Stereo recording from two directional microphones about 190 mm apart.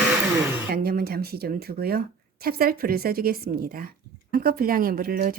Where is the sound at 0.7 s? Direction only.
55° right (ahead or behind).